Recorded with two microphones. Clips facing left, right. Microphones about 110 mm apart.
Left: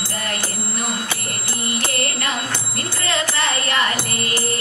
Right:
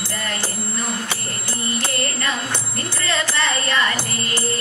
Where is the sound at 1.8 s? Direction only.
20° right (ahead or behind).